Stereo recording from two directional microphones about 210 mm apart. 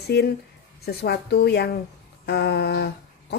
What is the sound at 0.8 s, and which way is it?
A woman's voice, 50° left (ahead or behind).